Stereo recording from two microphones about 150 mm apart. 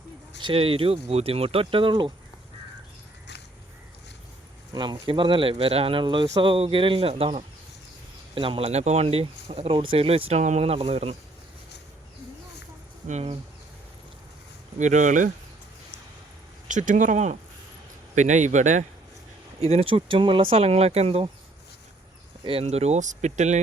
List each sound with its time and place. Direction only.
0.3 s speech: 35° right (ahead or behind)
4.7 s speech: 30° right (ahead or behind)
13.1 s speech: 50° right (ahead or behind)
14.8 s speech: 55° right (ahead or behind)
16.6 s speech: 60° right (ahead or behind)
19.5 s speech: 40° right (ahead or behind)
22.4 s speech: 40° right (ahead or behind)